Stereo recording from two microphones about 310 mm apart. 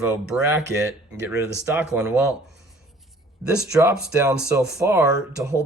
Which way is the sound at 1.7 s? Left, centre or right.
Centre.